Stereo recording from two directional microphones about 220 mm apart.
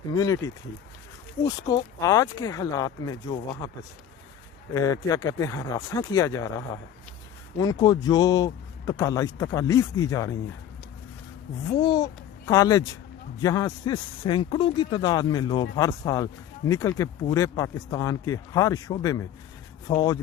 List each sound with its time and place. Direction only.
0.1 s speech: 15° left (ahead or behind)
4.7 s speech: 15° left (ahead or behind)
11.8 s a child's voice: 20° left (ahead or behind)